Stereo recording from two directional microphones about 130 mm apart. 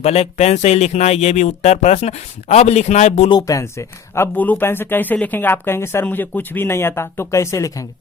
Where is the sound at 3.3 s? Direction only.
30° left (ahead or behind).